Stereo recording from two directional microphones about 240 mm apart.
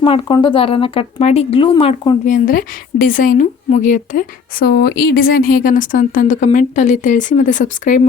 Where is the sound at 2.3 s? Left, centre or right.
Left.